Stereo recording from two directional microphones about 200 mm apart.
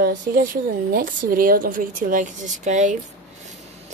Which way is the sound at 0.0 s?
45° right (ahead or behind).